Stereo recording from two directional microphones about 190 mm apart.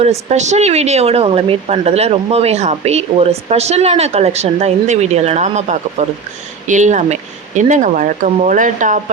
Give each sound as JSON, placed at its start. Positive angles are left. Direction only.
{"t": 0.0, "sound": "speech", "side_deg": -35}